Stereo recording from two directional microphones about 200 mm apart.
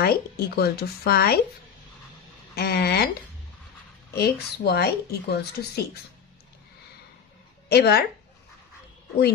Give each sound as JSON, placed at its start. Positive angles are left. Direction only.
{"t": 0.0, "sound": "speech", "side_deg": 50}
{"t": 2.5, "sound": "speech", "side_deg": 50}
{"t": 4.1, "sound": "speech", "side_deg": 55}
{"t": 7.6, "sound": "speech", "side_deg": 55}